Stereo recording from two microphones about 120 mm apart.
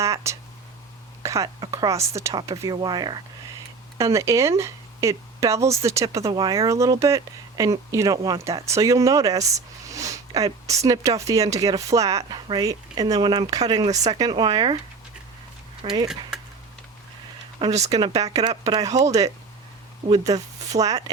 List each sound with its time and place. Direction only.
0.0 s speech: 25° right (ahead or behind)
2.7 s speech: 35° right (ahead or behind)
3.9 s speech: 25° right (ahead or behind)
6.3 s speech: 35° right (ahead or behind)
15.8 s speech: 50° right (ahead or behind)
17.6 s speech: 35° right (ahead or behind)